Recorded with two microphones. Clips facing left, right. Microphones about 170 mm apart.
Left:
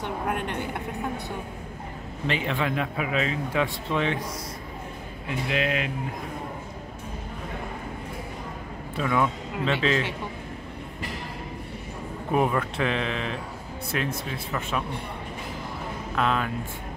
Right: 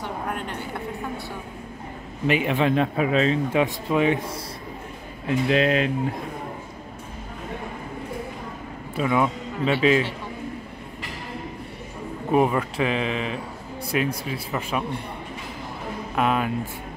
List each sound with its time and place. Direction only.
0.0 s a sound: 20° left (ahead or behind)
2.2 s speech: 15° right (ahead or behind)
2.7 s speech: 30° right (ahead or behind)
3.5 s speech: 15° right (ahead or behind)
5.5 s speech: 35° right (ahead or behind)
8.9 s speech: 10° right (ahead or behind)
12.3 s speech: 5° right (ahead or behind)
16.2 s speech: 15° right (ahead or behind)